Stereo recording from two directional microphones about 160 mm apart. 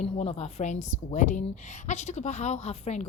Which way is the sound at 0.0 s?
40° left (ahead or behind).